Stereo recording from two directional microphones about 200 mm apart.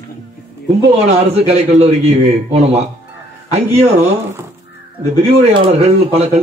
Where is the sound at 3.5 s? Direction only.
35° right (ahead or behind).